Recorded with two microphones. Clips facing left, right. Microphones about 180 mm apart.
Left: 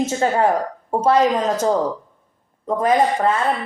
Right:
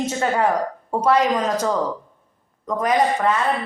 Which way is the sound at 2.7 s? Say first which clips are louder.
Left 2 dB; 30° left (ahead or behind).